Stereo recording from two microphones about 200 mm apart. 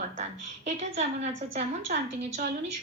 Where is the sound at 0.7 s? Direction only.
35° right (ahead or behind).